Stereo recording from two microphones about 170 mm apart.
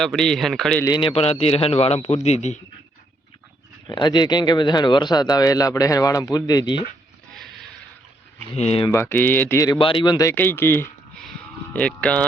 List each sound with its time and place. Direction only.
0.0 s a man's voice: centre (ahead or behind)
0.9 s a man's voice: 30° left (ahead or behind)
3.8 s speech: 25° left (ahead or behind)
7.3 s a sound: centre (ahead or behind)
8.5 s a man's voice: 35° left (ahead or behind)
8.9 s speech: 15° left (ahead or behind)
9.7 s speech: 30° left (ahead or behind); by 12.2 s 5° left (ahead or behind)